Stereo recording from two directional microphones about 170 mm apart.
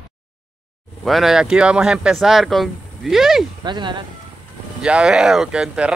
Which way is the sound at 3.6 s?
25° right (ahead or behind).